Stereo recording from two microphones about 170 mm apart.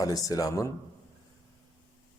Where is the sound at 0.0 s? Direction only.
20° left (ahead or behind).